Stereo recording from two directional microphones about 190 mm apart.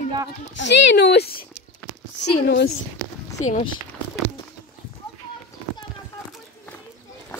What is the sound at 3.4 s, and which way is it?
Speech, 35° left (ahead or behind).